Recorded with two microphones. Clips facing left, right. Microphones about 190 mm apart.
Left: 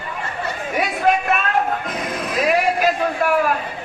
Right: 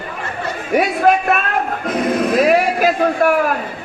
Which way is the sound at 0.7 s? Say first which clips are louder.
Right 5 dB; 50° right (ahead or behind).